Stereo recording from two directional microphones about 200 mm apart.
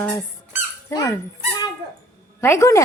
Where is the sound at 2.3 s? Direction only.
15° left (ahead or behind).